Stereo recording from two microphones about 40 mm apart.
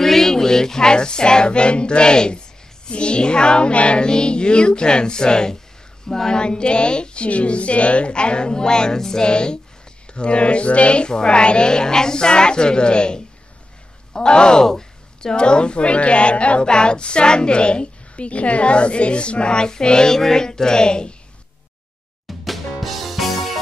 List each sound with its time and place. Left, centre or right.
0.0 s child singing: centre
2.9 s speech: left
22.4 s music: centre